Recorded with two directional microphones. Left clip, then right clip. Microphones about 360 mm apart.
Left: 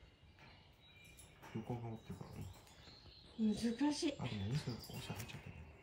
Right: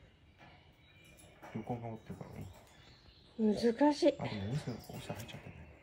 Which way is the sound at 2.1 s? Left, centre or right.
Centre.